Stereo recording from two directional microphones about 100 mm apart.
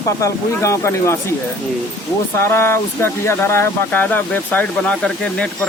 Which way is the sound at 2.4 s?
25° left (ahead or behind).